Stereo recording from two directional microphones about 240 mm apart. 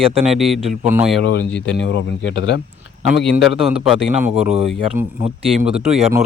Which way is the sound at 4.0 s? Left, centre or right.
Right.